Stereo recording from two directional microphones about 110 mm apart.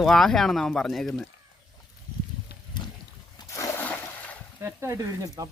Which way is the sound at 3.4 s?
25° left (ahead or behind).